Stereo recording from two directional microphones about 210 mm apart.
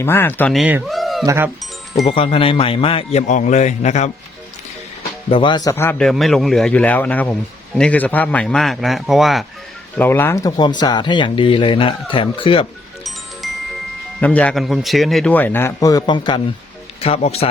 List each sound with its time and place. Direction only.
0.0 s speech: 10° left (ahead or behind)
1.2 s speech: 15° right (ahead or behind)
2.0 s speech: 25° left (ahead or behind)
5.3 s speech: 20° left (ahead or behind); by 9.5 s centre (ahead or behind)
10.0 s speech: 10° left (ahead or behind)
14.2 s speech: 5° left (ahead or behind); by 17.5 s 30° left (ahead or behind)